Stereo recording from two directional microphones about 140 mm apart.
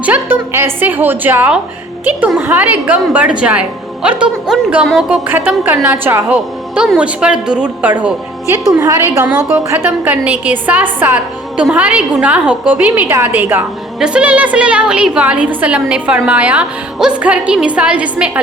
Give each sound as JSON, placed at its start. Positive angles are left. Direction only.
{"t": 0.0, "sound": "a woman's voice", "side_deg": -15}
{"t": 9.2, "sound": "a woman's voice", "side_deg": -10}